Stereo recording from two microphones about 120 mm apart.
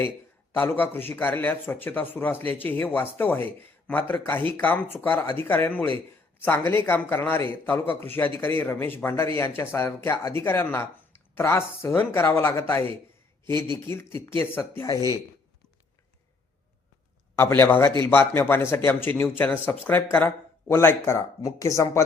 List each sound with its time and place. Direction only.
0.5 s speech: 15° left (ahead or behind)
17.3 s speech: 20° left (ahead or behind)